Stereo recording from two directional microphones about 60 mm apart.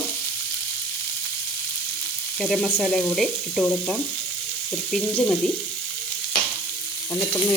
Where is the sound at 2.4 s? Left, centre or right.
Centre.